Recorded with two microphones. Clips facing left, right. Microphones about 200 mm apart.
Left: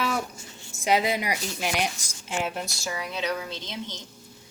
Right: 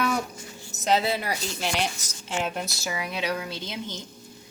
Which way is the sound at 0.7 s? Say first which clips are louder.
Even; 10° left (ahead or behind).